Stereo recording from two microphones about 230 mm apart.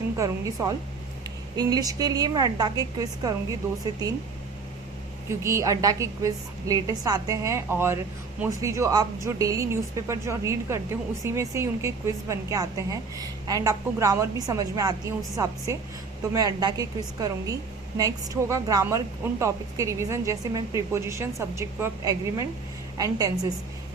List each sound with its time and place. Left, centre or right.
0.2 s a woman's voice: centre
5.3 s a woman's voice: centre